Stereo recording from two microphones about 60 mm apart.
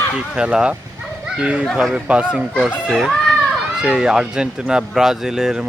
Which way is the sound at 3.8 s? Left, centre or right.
Centre.